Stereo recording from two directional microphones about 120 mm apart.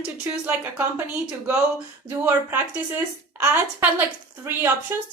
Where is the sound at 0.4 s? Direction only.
15° right (ahead or behind).